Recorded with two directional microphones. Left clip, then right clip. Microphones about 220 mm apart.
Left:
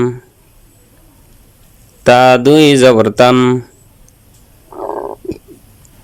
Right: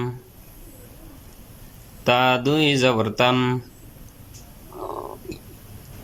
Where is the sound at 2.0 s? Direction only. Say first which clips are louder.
Left 12 dB; 45° left (ahead or behind).